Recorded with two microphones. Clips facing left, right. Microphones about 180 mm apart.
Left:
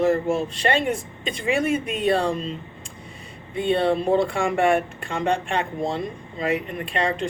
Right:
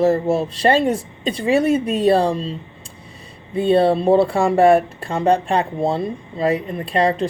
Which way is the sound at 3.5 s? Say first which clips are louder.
Right 6 dB; 35° right (ahead or behind).